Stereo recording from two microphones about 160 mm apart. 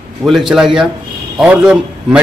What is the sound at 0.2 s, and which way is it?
A man's voice, centre (ahead or behind).